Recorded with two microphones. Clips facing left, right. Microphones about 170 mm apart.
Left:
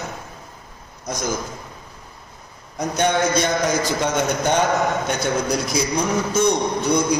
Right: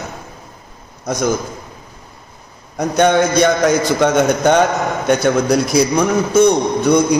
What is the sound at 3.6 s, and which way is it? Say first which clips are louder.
A man's voice: right 7 dB; 65° right (ahead or behind).